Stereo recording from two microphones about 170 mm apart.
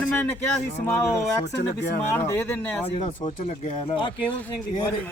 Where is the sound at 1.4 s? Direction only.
70° left (ahead or behind).